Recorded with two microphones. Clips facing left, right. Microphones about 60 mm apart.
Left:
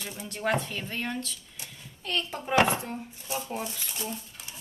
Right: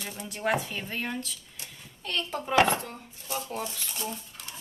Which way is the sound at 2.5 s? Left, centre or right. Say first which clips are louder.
Even; centre.